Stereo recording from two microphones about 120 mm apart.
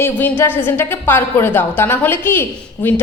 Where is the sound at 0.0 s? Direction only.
15° left (ahead or behind).